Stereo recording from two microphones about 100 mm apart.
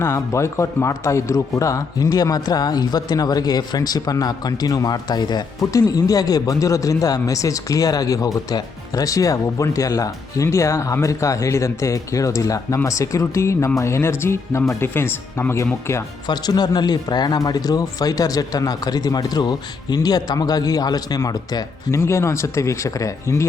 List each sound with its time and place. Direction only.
0.0 s speech: 30° left (ahead or behind)
16.2 s speech: 45° left (ahead or behind); by 23.5 s 30° left (ahead or behind)